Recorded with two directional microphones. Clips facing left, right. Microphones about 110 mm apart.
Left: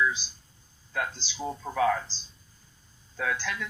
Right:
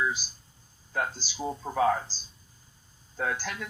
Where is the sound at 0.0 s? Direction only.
45° right (ahead or behind).